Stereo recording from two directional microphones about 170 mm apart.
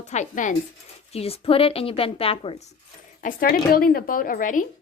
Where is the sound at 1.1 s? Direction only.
35° left (ahead or behind).